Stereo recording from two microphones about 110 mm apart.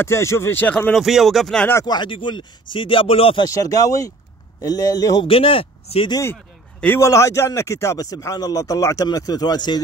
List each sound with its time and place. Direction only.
0.0 s speech: 25° left (ahead or behind)
0.9 s speech: centre (ahead or behind)
1.9 s speech: 45° left (ahead or behind)
3.4 s a man's voice: 35° left (ahead or behind)
5.2 s speech: 55° left (ahead or behind)
7.0 s a man's voice: 30° left (ahead or behind)